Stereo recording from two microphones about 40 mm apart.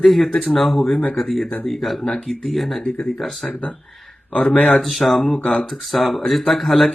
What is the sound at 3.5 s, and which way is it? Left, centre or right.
Speech, left.